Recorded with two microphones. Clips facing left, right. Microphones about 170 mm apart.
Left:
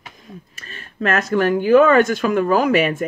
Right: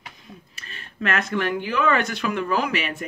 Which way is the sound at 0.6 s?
45° left (ahead or behind).